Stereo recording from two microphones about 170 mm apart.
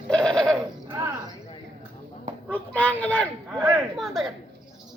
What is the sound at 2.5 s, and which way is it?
Speech, 10° left (ahead or behind).